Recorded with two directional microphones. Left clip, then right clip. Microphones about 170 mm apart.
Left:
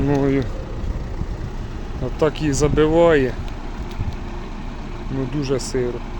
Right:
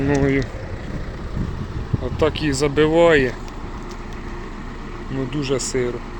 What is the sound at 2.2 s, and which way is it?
Speech, 10° left (ahead or behind).